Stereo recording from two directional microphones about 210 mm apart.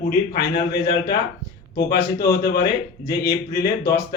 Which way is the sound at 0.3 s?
50° left (ahead or behind).